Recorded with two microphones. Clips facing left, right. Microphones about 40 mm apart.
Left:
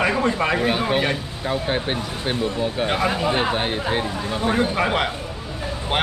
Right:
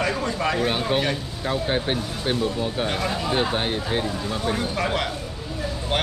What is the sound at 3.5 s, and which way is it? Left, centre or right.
Speech, centre.